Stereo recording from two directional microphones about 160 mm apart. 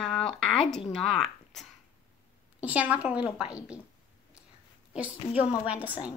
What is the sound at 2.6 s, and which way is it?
A woman's voice, 10° right (ahead or behind).